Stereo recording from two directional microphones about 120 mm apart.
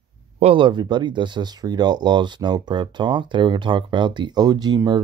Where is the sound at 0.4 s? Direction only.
50° right (ahead or behind).